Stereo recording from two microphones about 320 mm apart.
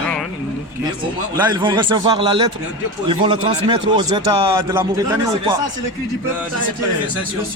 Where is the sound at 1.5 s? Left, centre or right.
Centre.